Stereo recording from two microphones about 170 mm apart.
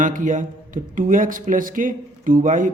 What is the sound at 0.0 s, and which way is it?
Speech, 50° right (ahead or behind).